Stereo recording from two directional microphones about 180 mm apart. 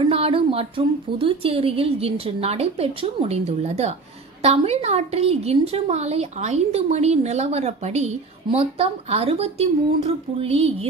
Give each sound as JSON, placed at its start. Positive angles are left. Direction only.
{"t": 0.0, "sound": "a woman's voice", "side_deg": -30}